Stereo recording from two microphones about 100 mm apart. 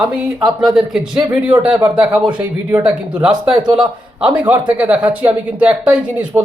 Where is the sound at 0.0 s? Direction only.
5° right (ahead or behind).